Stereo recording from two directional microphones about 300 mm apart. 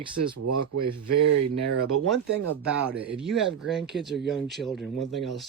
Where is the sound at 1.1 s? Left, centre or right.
Right.